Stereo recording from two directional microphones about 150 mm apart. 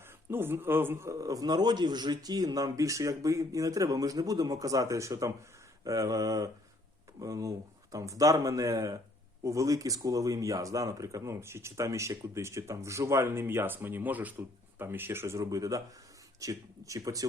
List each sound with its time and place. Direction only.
0.3 s speech: 15° right (ahead or behind)